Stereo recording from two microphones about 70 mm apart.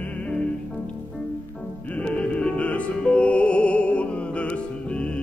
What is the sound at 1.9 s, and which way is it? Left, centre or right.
Music, centre.